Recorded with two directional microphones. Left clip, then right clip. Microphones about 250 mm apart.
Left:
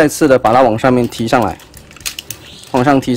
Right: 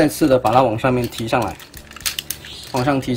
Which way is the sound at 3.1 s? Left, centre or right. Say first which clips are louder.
Left 6 dB; centre.